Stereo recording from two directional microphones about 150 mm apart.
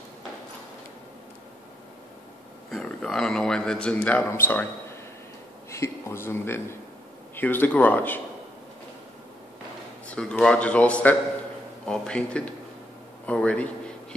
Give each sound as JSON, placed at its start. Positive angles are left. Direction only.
{"t": 2.7, "sound": "speech", "side_deg": 5}
{"t": 5.7, "sound": "speech", "side_deg": 20}
{"t": 10.0, "sound": "speech", "side_deg": 10}